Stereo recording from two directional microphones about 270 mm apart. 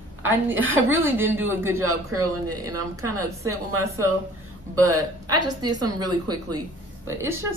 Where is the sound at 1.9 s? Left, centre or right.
Right.